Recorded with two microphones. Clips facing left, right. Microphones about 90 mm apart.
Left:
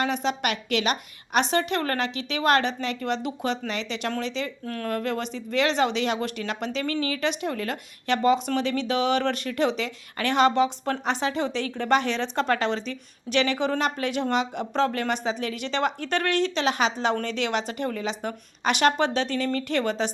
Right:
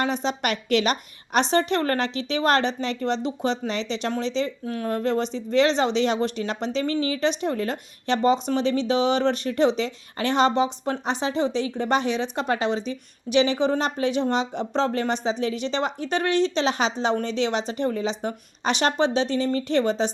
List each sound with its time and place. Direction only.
0.0 s a woman's voice: 30° right (ahead or behind)
4.6 s speech: 15° right (ahead or behind)
4.9 s speech: 25° right (ahead or behind)